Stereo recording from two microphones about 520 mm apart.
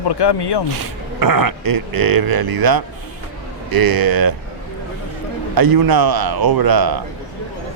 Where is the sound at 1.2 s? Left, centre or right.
Right.